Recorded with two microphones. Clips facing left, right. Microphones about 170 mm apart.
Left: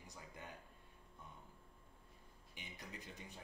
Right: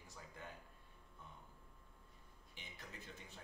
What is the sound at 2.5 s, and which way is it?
Speech, 15° left (ahead or behind).